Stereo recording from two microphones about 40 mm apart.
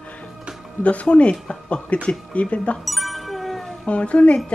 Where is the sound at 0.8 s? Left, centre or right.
Left.